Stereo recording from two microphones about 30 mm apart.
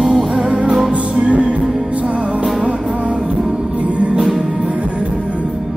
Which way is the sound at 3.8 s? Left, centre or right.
Right.